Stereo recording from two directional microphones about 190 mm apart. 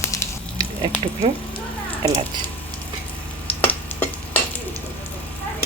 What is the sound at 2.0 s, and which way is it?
Speech, 20° right (ahead or behind).